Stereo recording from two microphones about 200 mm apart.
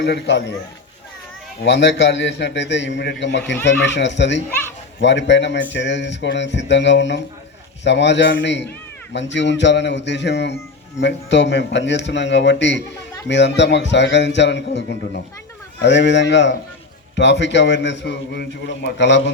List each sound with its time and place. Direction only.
0.0 s a man's voice: 60° left (ahead or behind)
1.6 s a man's voice: 60° left (ahead or behind)